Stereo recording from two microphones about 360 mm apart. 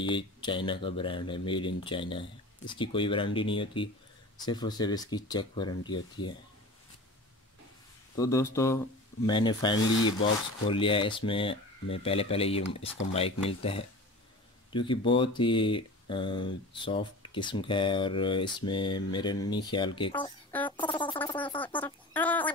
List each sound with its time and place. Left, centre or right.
0.0 s speech: centre
8.2 s speech: centre